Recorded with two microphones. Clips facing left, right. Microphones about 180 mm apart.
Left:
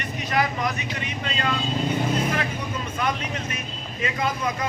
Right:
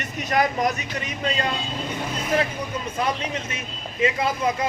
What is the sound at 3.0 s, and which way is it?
Speech, 30° right (ahead or behind).